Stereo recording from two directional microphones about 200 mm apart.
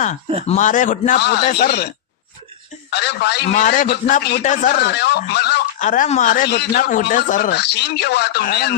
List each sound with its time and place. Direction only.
0.4 s a man's voice: 35° left (ahead or behind)
1.2 s a man's voice: 55° left (ahead or behind)
2.9 s speech: 55° left (ahead or behind)
3.5 s a man's voice: 40° left (ahead or behind)
4.4 s speech: 40° left (ahead or behind); by 5.6 s 55° left (ahead or behind)
5.8 s a man's voice: 40° left (ahead or behind)
7.6 s speech: 60° left (ahead or behind)